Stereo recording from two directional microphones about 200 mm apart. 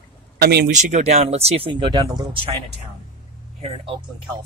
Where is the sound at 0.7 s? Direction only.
35° right (ahead or behind).